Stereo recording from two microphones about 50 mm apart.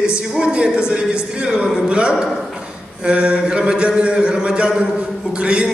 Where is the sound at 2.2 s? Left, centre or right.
Centre.